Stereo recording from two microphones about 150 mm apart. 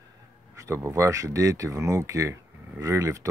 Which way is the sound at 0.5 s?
20° right (ahead or behind).